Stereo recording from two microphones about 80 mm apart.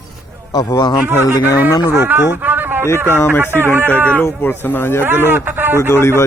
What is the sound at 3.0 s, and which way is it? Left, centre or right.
Speech, left.